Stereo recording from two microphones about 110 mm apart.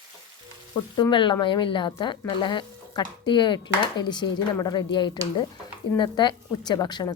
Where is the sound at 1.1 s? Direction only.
45° left (ahead or behind).